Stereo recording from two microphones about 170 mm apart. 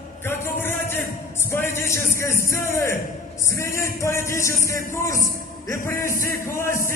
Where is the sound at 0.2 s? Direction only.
15° left (ahead or behind).